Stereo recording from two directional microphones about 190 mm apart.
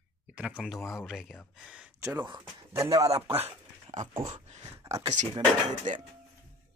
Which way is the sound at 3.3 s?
35° right (ahead or behind).